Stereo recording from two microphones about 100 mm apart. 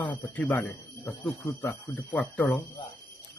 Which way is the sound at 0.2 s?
15° left (ahead or behind).